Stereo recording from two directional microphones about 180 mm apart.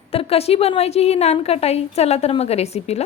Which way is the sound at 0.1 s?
35° left (ahead or behind).